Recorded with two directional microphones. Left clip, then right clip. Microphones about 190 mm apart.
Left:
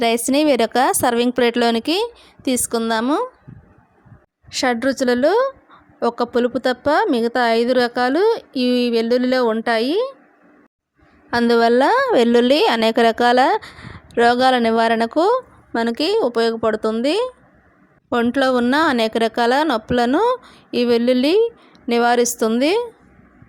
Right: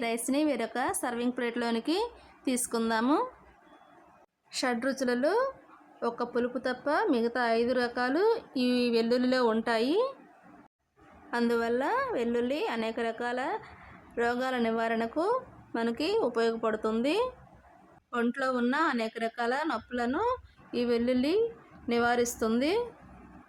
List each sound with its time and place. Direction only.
0.0 s a woman's voice: 45° left (ahead or behind)
4.5 s a woman's voice: 30° left (ahead or behind)
11.3 s a woman's voice: 35° left (ahead or behind)